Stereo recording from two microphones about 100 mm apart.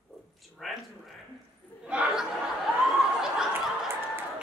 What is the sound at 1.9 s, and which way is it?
Chatter, 10° right (ahead or behind).